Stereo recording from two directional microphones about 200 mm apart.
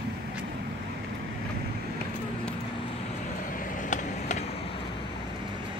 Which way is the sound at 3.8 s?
35° left (ahead or behind).